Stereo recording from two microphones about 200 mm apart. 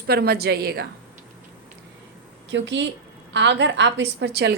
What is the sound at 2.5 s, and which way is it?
A woman's voice, 65° right (ahead or behind).